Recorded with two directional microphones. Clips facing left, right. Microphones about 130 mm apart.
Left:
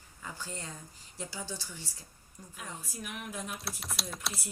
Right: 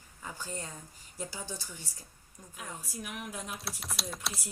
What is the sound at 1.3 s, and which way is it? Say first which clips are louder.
Speech: left 4 dB; 20° right (ahead or behind).